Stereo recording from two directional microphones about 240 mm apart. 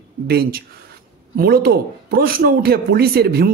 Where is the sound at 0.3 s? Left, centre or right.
Right.